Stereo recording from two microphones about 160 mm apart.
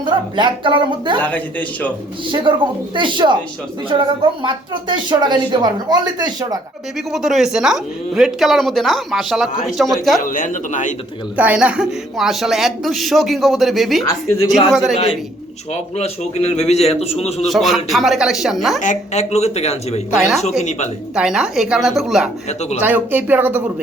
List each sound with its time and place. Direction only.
0.0 s a woman's voice: 30° right (ahead or behind)
1.2 s speech: 10° left (ahead or behind)
2.3 s speech: 30° right (ahead or behind)
7.1 s a woman's voice: centre (ahead or behind)
10.2 s speech: 55° left (ahead or behind)
11.3 s a woman's voice: 10° right (ahead or behind)
15.7 s a man's voice: 45° left (ahead or behind)
17.5 s a woman's voice: centre (ahead or behind)
18.8 s speech: 45° left (ahead or behind)
20.1 s a woman's voice: centre (ahead or behind)
20.4 s speech: 50° left (ahead or behind)
21.2 s a woman's voice: 5° right (ahead or behind)